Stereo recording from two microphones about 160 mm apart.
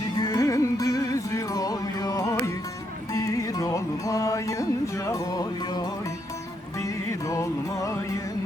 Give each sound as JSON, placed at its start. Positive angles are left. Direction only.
{"t": 0.2, "sound": "music", "side_deg": 20}